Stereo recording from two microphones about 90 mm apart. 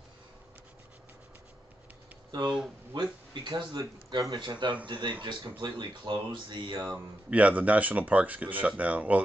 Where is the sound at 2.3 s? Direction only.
55° right (ahead or behind).